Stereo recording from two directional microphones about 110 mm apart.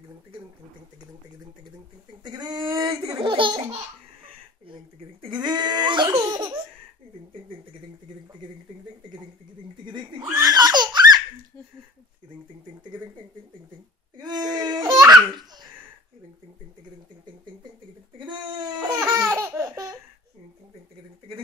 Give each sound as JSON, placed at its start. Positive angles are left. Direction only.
{"t": 2.2, "sound": "a sound", "side_deg": -40}
{"t": 3.3, "sound": "laughter", "side_deg": -50}
{"t": 4.6, "sound": "laughter", "side_deg": -50}
{"t": 9.8, "sound": "a sound", "side_deg": -45}
{"t": 10.3, "sound": "laughter", "side_deg": -35}
{"t": 14.1, "sound": "laughter", "side_deg": -40}
{"t": 18.1, "sound": "laughter", "side_deg": -40}